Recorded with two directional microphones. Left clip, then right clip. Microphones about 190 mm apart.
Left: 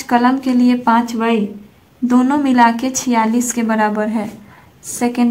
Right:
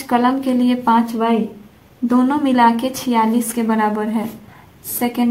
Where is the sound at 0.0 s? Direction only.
20° left (ahead or behind).